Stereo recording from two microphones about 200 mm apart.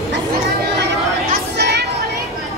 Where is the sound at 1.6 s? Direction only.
55° right (ahead or behind).